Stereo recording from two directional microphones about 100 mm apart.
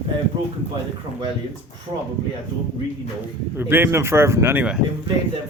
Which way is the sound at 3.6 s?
20° right (ahead or behind).